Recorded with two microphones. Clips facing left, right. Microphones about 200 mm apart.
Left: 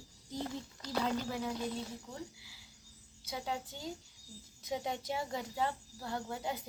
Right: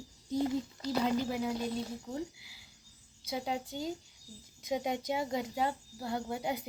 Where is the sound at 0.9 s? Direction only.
10° right (ahead or behind).